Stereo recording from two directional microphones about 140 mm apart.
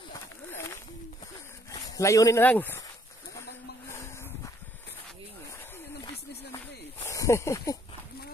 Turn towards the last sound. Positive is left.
turn(degrees=20)  # may be behind; listen again after turning